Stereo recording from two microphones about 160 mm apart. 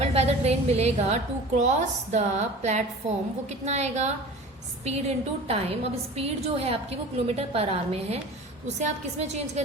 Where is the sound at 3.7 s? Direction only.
45° right (ahead or behind).